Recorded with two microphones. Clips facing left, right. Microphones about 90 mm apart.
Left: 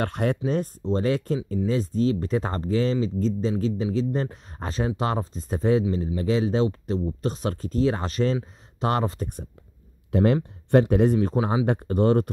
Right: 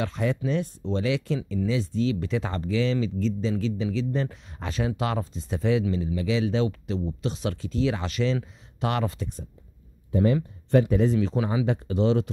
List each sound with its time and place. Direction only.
0.0 s speech: 55° left (ahead or behind)
0.5 s speech: 45° left (ahead or behind)
10.1 s speech: 65° left (ahead or behind)